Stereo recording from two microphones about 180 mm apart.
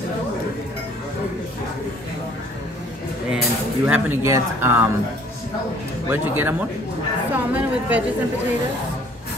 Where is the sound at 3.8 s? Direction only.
10° right (ahead or behind).